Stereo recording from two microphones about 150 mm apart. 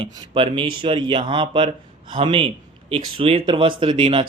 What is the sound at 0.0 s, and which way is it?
Speech, 35° right (ahead or behind).